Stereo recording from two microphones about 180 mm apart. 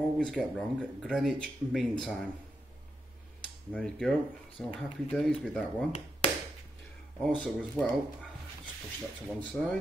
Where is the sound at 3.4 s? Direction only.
5° left (ahead or behind).